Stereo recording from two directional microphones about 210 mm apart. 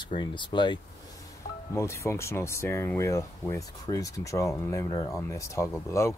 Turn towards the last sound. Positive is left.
turn(degrees=15)  # may be behind; listen again after turning